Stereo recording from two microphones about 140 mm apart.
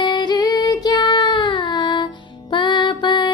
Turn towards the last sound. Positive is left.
turn(degrees=35)  # may be behind; listen again after turning